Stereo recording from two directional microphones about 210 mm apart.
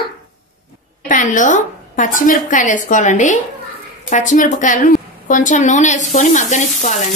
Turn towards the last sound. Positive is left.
turn(degrees=35)  # may be behind; listen again after turning